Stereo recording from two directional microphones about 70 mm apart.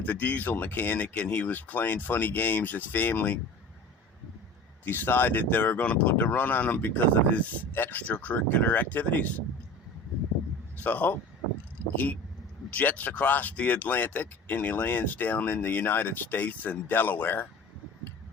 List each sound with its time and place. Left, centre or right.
0.0 s speech: left
4.9 s speech: left
10.8 s speech: left
12.7 s speech: left